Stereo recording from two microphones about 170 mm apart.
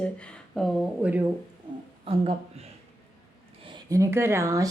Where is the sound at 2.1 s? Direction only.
35° right (ahead or behind).